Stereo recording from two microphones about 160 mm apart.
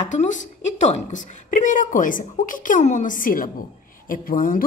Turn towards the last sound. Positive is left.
turn(degrees=60)  # may be behind; listen again after turning